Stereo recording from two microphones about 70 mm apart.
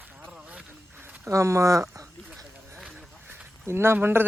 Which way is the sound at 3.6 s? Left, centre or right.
Right.